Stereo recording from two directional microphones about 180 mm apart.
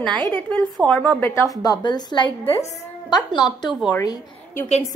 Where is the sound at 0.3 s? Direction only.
5° left (ahead or behind); by 2.8 s 35° left (ahead or behind).